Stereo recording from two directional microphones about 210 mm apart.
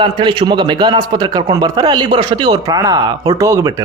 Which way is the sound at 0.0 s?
20° right (ahead or behind).